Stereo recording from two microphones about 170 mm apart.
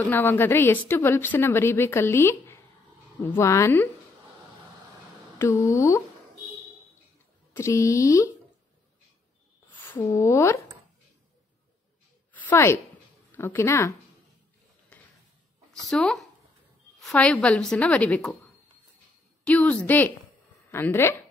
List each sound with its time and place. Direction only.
0.0 s a woman's voice: 10° left (ahead or behind)
5.7 s a woman's voice: 15° left (ahead or behind)
7.5 s a woman's voice: 15° left (ahead or behind)
9.8 s a woman's voice: 15° left (ahead or behind)
12.3 s a sound: 10° left (ahead or behind)
13.3 s a woman's voice: 15° left (ahead or behind)
15.9 s a woman's voice: 5° left (ahead or behind)
19.4 s a woman's voice: 5° left (ahead or behind)